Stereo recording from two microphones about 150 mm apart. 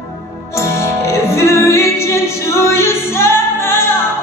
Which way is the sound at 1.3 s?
20° left (ahead or behind).